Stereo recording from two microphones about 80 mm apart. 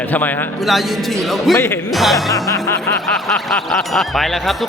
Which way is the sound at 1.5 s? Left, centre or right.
Left.